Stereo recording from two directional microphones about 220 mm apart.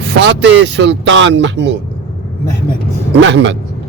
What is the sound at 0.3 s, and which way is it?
Speech, 55° right (ahead or behind).